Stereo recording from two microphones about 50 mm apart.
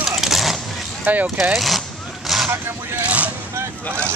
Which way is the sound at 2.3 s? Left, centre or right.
Centre.